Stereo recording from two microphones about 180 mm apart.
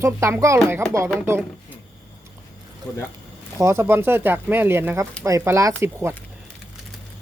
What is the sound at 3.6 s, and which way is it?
Speech, 15° right (ahead or behind).